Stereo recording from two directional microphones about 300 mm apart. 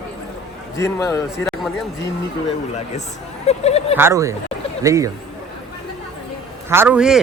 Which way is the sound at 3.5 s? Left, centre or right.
Left.